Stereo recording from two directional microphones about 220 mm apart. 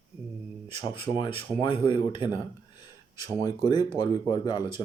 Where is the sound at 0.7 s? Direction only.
25° left (ahead or behind).